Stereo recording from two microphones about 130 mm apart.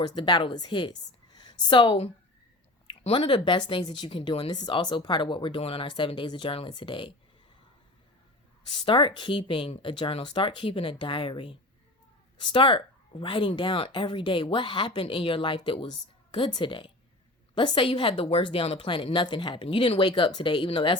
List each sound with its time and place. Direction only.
0.0 s a woman's voice: 35° left (ahead or behind)
8.7 s speech: 40° left (ahead or behind)